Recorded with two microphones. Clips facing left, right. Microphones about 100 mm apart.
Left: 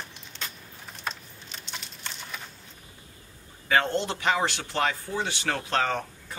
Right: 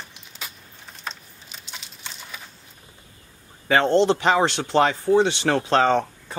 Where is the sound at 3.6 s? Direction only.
30° right (ahead or behind).